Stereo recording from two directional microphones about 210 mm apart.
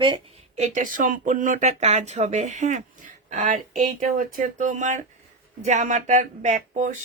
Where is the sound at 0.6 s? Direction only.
35° right (ahead or behind).